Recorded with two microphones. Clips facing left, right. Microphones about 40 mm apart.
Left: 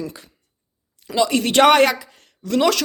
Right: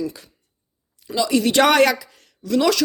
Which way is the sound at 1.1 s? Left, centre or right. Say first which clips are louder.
Left 1 dB; left.